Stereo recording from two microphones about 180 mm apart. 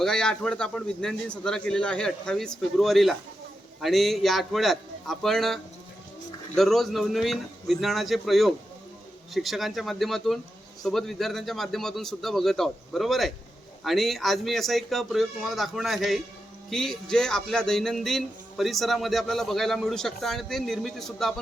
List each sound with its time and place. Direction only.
0.0 s speech: 5° left (ahead or behind)
6.6 s speech: centre (ahead or behind)